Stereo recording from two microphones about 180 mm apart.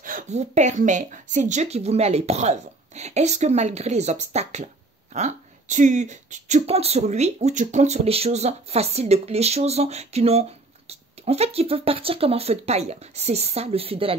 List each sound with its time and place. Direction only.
0.0 s speech: 45° right (ahead or behind)